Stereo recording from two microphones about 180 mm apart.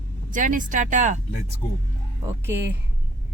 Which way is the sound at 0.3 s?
45° right (ahead or behind).